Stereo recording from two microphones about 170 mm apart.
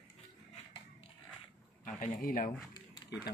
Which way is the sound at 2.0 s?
55° left (ahead or behind).